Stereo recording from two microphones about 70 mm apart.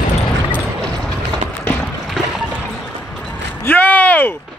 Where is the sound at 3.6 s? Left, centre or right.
Left.